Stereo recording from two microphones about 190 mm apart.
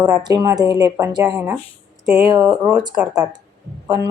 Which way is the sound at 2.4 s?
5° right (ahead or behind).